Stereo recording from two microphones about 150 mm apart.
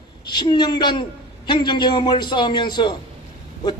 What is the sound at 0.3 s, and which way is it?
A man's voice, 30° left (ahead or behind).